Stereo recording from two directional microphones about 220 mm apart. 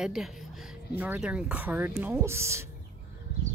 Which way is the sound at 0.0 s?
Centre (ahead or behind).